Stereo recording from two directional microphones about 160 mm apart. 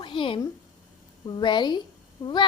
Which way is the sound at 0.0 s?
30° left (ahead or behind).